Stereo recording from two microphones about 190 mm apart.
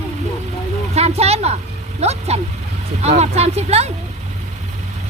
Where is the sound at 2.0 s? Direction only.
35° right (ahead or behind).